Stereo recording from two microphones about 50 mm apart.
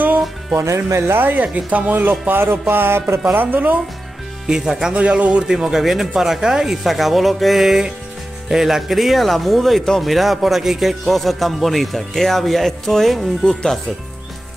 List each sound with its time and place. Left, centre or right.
0.6 s speech: right
1.2 s speech: right
2.7 s music: right
3.3 s speech: right
4.5 s speech: centre
4.9 s a man's voice: right
5.5 s speech: centre